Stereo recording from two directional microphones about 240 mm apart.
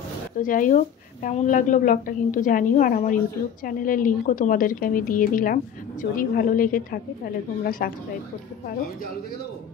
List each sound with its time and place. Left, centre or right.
0.4 s a woman's voice: left